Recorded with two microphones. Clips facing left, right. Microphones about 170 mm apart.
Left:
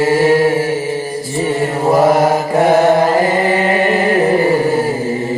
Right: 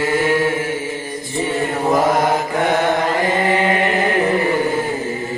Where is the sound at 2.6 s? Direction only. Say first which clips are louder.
Left 9 dB; 30° left (ahead or behind).